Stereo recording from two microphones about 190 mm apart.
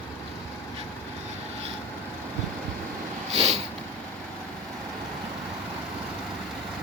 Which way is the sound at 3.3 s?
35° right (ahead or behind).